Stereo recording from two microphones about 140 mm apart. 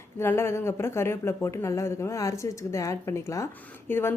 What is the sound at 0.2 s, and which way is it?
Speech, 20° left (ahead or behind).